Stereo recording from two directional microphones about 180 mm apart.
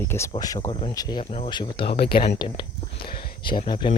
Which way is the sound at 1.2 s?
35° left (ahead or behind).